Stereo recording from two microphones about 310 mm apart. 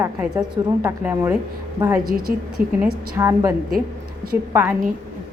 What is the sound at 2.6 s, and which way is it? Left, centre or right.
Speech, right.